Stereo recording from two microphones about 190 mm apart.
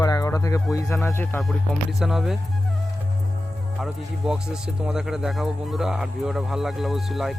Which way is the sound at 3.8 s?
5° right (ahead or behind).